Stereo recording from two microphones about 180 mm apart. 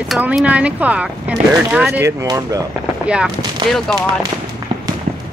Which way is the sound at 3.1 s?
5° right (ahead or behind).